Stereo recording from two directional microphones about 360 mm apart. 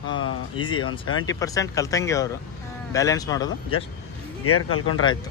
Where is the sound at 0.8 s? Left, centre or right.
Left.